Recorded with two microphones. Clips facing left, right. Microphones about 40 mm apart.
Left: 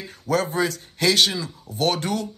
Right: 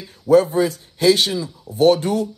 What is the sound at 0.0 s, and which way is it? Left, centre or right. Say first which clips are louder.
A man's voice: right 9 dB; left.